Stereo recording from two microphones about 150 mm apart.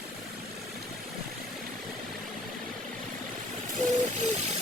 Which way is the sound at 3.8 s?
50° right (ahead or behind).